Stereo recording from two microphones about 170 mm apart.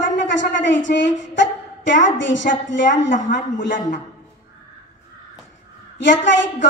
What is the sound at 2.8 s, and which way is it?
A woman's voice, 50° left (ahead or behind).